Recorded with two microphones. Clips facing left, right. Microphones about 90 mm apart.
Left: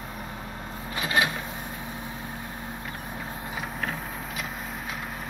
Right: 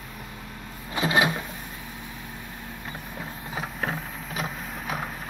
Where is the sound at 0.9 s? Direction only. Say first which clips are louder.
Right 3 dB; 25° right (ahead or behind).